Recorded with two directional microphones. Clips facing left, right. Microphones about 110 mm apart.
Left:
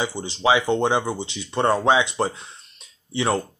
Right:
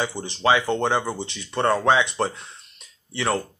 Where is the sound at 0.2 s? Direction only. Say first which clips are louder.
Left 1 dB; 15° left (ahead or behind).